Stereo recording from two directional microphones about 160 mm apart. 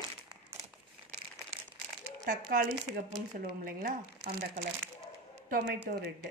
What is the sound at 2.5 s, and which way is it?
A woman's voice, 55° right (ahead or behind).